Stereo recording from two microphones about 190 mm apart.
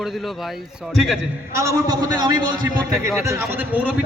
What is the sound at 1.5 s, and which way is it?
A man's voice, 15° right (ahead or behind).